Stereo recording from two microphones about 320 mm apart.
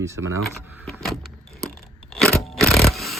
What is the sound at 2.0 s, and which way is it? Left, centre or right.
Scrape, centre.